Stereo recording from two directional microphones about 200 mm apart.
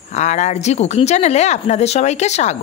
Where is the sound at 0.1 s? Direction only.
35° left (ahead or behind).